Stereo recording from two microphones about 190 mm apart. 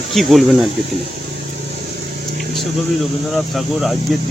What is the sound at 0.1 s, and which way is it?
Speech, centre (ahead or behind).